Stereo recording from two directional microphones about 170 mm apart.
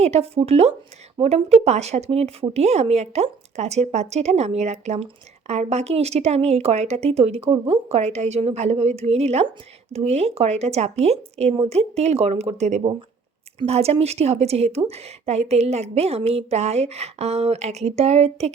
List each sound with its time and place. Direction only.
0.0 s a woman's voice: 40° right (ahead or behind)